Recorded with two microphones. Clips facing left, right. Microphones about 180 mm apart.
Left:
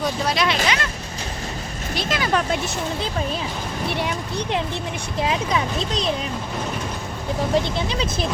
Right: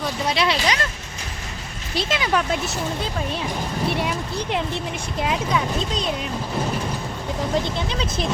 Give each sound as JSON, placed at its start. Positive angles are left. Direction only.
{"t": 0.3, "sound": "speech", "side_deg": -35}
{"t": 2.0, "sound": "speech", "side_deg": -20}
{"t": 5.3, "sound": "speech", "side_deg": 0}